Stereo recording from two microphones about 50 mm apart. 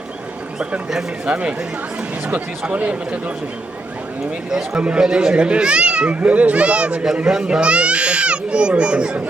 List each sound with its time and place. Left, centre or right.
0.9 s speech: centre
1.3 s a child's voice: right
4.8 s a child's voice: right